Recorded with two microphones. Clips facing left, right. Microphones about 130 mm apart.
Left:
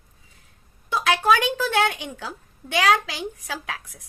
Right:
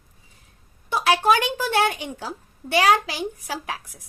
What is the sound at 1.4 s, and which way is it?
A woman's voice, 10° right (ahead or behind).